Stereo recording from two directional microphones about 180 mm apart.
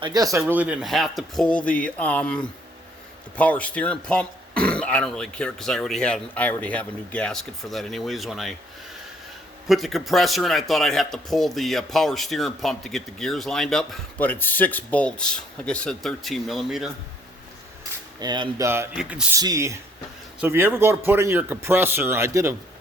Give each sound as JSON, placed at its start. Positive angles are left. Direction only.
{"t": 0.0, "sound": "speech", "side_deg": -20}
{"t": 9.6, "sound": "speech", "side_deg": 0}
{"t": 18.2, "sound": "a man's voice", "side_deg": -25}
{"t": 19.4, "sound": "a man's voice", "side_deg": -20}